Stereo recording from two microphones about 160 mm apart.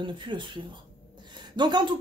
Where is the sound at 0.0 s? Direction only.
30° right (ahead or behind).